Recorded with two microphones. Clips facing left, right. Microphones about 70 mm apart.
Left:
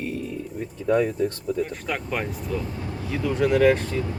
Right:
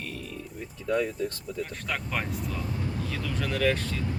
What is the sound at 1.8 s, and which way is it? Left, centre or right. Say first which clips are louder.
Speech: left 4 dB; centre.